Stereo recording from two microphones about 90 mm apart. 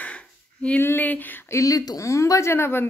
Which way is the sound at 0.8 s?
25° left (ahead or behind).